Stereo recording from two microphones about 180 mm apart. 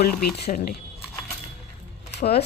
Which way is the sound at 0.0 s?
60° left (ahead or behind).